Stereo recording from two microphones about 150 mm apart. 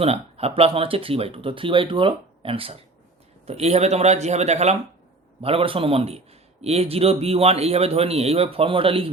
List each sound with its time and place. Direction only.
0.0 s a man's voice: 40° right (ahead or behind)